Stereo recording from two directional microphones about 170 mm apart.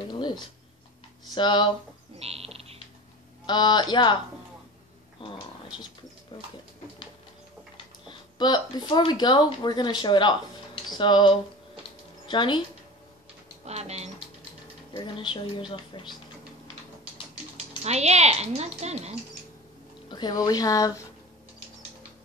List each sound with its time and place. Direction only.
0.1 s speech: 25° left (ahead or behind)
2.1 s bird: 35° right (ahead or behind)
3.4 s speech: 25° left (ahead or behind)
5.2 s speech: 30° left (ahead or behind)
7.7 s speech: 25° left (ahead or behind)
13.7 s speech: 40° right (ahead or behind)
15.0 s speech: 25° left (ahead or behind)
17.6 s speech: 40° right (ahead or behind)
20.1 s speech: 25° left (ahead or behind)